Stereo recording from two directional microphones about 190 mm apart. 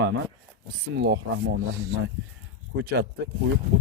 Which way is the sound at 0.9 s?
60° right (ahead or behind).